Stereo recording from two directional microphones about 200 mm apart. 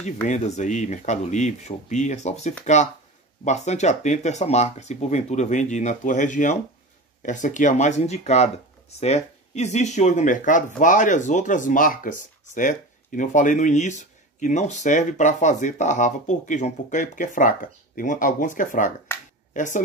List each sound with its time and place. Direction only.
0.3 s speech: 35° left (ahead or behind)
19.1 s a sound: 10° left (ahead or behind)
19.5 s speech: 40° left (ahead or behind)